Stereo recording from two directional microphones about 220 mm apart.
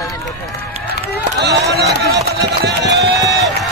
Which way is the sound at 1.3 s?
50° right (ahead or behind).